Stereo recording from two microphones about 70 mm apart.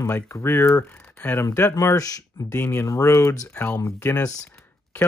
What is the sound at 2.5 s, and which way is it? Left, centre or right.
Speech, left.